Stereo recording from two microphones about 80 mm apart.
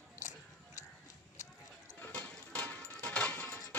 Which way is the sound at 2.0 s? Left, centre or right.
Centre.